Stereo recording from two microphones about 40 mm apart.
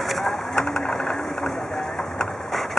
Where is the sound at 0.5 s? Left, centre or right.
Left.